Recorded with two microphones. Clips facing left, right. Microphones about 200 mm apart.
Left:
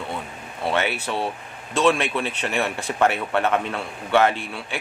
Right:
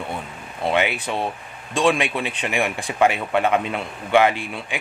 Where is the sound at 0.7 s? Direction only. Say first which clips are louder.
Right 2 dB; 15° right (ahead or behind).